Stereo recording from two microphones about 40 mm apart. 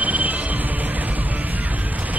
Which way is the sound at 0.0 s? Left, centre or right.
Right.